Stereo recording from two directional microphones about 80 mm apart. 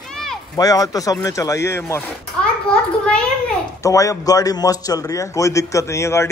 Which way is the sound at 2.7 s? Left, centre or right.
Centre.